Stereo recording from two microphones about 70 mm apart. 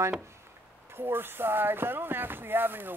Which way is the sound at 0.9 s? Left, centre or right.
Right.